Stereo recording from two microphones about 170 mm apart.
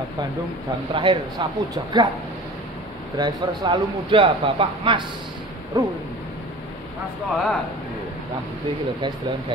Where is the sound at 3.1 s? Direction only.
25° right (ahead or behind).